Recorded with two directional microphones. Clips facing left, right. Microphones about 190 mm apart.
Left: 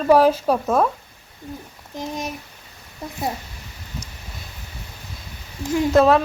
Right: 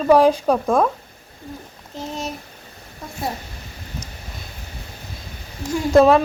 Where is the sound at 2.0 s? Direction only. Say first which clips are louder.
Even; 15° left (ahead or behind).